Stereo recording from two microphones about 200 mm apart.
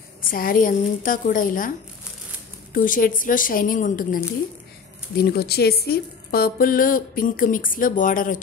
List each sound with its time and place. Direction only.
0.2 s a woman's voice: 45° left (ahead or behind)
2.7 s a woman's voice: 45° left (ahead or behind)